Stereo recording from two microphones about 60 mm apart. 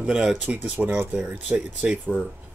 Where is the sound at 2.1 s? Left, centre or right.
Centre.